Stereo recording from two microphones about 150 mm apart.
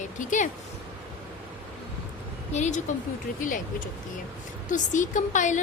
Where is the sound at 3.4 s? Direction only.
60° left (ahead or behind).